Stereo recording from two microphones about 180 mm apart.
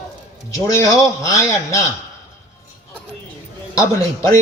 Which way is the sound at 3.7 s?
15° left (ahead or behind).